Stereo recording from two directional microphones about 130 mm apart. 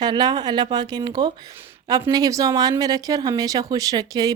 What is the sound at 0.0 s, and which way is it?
A woman's voice, 30° right (ahead or behind).